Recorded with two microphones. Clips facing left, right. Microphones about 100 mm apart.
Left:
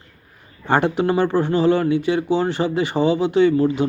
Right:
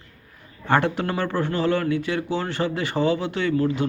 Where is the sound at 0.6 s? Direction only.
15° left (ahead or behind).